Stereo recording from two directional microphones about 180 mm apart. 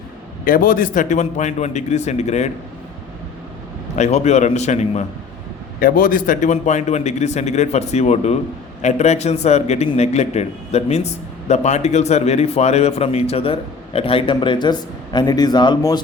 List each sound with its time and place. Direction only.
0.4 s a man's voice: 50° left (ahead or behind)
3.9 s a man's voice: 40° left (ahead or behind)
5.8 s a man's voice: 50° left (ahead or behind); by 16.0 s 20° left (ahead or behind)